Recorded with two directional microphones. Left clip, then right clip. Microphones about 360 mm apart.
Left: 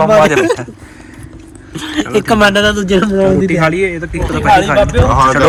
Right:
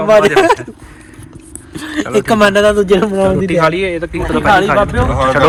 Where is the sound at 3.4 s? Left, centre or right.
Centre.